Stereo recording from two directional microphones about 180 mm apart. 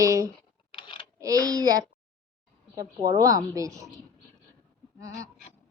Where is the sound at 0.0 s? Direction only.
20° right (ahead or behind).